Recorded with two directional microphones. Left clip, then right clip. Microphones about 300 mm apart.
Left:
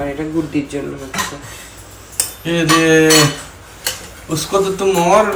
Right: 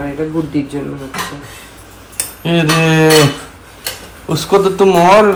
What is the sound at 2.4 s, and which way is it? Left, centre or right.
Speech, centre.